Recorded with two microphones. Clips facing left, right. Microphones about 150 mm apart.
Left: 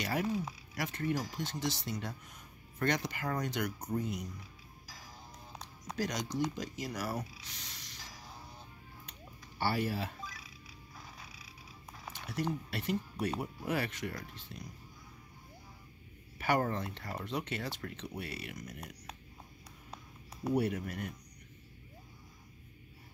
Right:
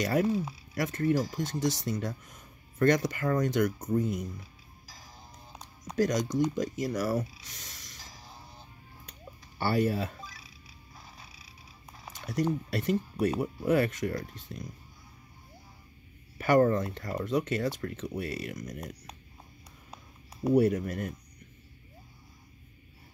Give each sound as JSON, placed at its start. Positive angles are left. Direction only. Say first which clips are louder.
{"t": 0.0, "sound": "speech", "louder": "right 7 dB", "side_deg": -45}
{"t": 5.9, "sound": "speech", "louder": "right 8 dB", "side_deg": -45}
{"t": 7.5, "sound": "a sound", "louder": "right 1 dB", "side_deg": -45}
{"t": 8.0, "sound": "music", "louder": "even", "side_deg": -25}
{"t": 9.6, "sound": "speech", "louder": "right 6 dB", "side_deg": -40}
{"t": 10.2, "sound": "music", "louder": "left 1 dB", "side_deg": -30}
{"t": 11.0, "sound": "purr", "louder": "even", "side_deg": -30}
{"t": 12.1, "sound": "speech", "louder": "right 6 dB", "side_deg": -40}
{"t": 16.3, "sound": "speech", "louder": "right 8 dB", "side_deg": -45}
{"t": 20.6, "sound": "speech", "louder": "right 8 dB", "side_deg": -40}